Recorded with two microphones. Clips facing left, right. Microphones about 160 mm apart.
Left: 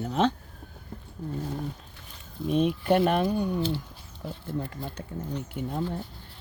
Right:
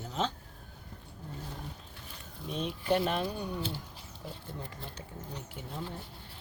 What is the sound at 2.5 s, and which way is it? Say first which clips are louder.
Speech: left 7 dB; 55° left (ahead or behind).